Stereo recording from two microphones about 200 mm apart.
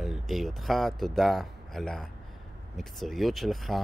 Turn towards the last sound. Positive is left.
turn(degrees=0)  # may be behind; listen again after turning